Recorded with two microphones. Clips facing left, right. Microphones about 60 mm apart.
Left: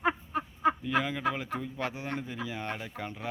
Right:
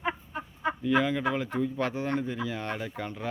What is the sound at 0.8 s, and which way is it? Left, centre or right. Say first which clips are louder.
Speech: right 4 dB; centre.